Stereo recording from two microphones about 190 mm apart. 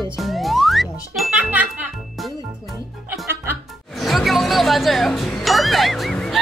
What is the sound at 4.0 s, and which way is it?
Music, centre (ahead or behind).